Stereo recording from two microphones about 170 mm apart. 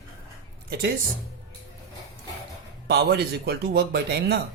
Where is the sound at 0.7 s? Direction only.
70° right (ahead or behind).